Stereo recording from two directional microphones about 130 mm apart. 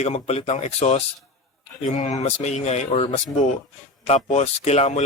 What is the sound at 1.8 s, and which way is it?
Speech, 70° left (ahead or behind).